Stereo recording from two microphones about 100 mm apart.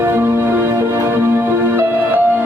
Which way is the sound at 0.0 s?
25° right (ahead or behind).